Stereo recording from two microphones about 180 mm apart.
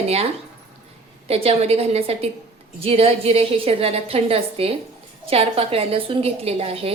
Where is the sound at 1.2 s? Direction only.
35° right (ahead or behind).